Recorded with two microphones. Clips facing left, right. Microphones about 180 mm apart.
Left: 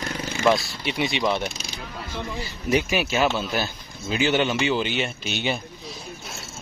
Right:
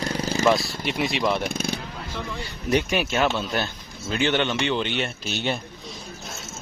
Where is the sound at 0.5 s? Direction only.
Centre (ahead or behind).